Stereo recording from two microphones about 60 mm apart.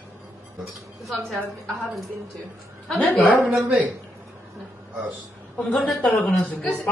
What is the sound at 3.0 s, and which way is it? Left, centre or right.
Speech, left.